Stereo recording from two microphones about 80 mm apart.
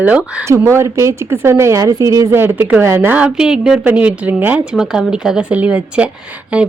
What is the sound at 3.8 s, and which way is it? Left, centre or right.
Speech, centre.